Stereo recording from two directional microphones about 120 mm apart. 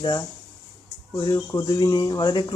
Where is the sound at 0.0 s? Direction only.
40° left (ahead or behind).